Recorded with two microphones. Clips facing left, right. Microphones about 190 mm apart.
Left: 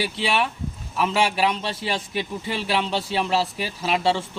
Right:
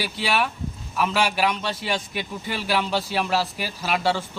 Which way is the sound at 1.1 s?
30° left (ahead or behind).